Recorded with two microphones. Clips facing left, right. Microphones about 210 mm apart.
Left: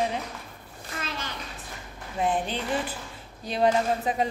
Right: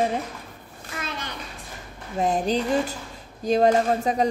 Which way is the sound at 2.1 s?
40° right (ahead or behind).